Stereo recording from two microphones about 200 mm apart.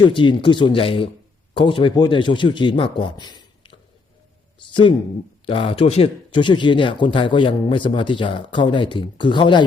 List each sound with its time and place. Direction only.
0.0 s speech: 25° left (ahead or behind)